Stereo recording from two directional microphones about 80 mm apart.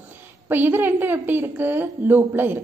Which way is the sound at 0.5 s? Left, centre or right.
Right.